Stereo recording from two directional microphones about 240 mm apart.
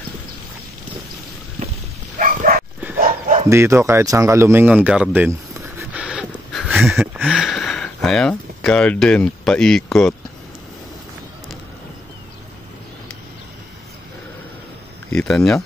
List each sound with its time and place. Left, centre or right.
2.1 s bow-wow: right
3.4 s speech: centre
15.0 s speech: centre